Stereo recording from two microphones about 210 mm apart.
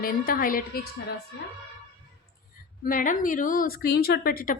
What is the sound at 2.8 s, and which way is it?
A woman's voice, 40° left (ahead or behind).